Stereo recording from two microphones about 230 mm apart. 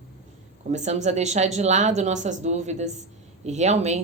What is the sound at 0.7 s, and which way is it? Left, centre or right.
Speech, right.